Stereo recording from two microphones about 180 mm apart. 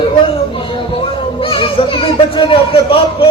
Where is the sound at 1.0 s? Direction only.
30° left (ahead or behind).